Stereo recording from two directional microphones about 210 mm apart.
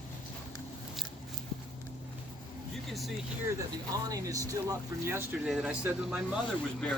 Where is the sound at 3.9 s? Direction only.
15° right (ahead or behind).